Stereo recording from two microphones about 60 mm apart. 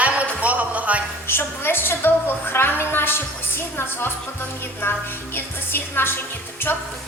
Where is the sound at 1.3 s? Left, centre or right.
Left.